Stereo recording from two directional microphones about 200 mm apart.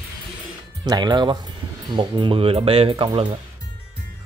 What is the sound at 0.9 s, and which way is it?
Speech, 20° right (ahead or behind).